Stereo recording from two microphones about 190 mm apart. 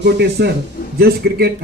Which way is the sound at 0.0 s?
60° right (ahead or behind).